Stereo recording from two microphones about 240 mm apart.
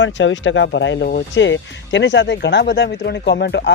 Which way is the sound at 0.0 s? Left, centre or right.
Left.